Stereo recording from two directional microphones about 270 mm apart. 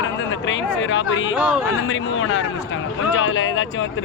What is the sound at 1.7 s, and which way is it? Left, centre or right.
Speech, left.